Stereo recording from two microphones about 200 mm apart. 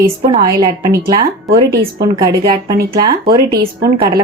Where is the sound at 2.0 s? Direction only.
20° right (ahead or behind).